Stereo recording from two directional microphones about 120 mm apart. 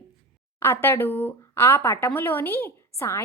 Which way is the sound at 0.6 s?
15° left (ahead or behind).